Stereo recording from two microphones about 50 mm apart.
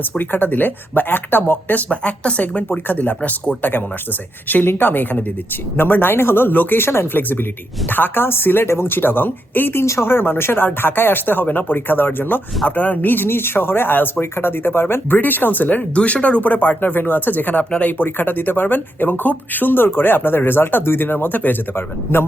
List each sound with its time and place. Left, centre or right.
0.2 s speech: left
1.9 s speech: left
2.6 s speech: left
21.8 s speech: left